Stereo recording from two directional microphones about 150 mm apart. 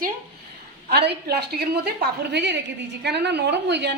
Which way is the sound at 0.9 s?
90° right.